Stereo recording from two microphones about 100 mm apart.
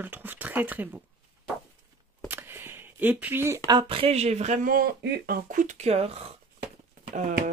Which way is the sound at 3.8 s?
70° right (ahead or behind).